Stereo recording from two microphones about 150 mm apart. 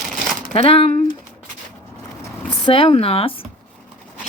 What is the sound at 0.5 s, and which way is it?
Speech, 40° left (ahead or behind).